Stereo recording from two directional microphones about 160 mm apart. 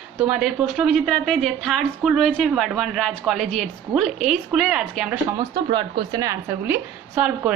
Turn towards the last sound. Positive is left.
turn(degrees=-5)  # may be behind; listen again after turning